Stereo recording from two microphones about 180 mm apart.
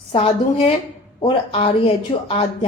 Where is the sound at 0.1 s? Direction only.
30° left (ahead or behind).